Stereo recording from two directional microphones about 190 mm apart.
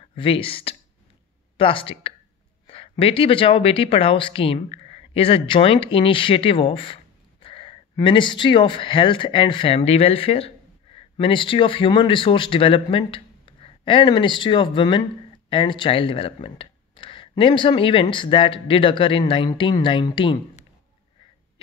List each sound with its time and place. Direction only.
0.1 s speech: 30° left (ahead or behind)